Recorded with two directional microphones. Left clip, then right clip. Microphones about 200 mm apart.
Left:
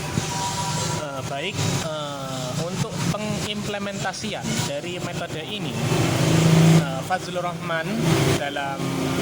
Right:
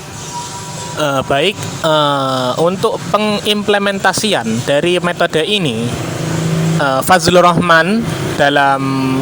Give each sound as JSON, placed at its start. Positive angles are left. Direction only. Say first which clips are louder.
{"t": 1.0, "sound": "speech", "louder": "right 15 dB", "side_deg": -55}
{"t": 6.8, "sound": "speech", "louder": "right 15 dB", "side_deg": -55}